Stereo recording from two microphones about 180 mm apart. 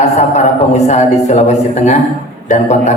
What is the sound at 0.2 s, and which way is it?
A man's voice, 40° left (ahead or behind).